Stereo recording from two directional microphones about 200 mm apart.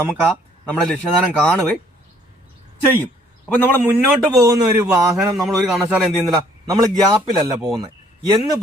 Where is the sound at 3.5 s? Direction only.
10° left (ahead or behind).